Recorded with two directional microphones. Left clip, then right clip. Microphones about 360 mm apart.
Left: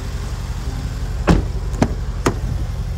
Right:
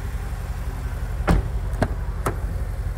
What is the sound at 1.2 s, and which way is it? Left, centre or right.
Vehicle, left.